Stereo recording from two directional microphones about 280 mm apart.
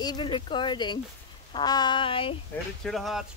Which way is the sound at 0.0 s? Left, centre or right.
Centre.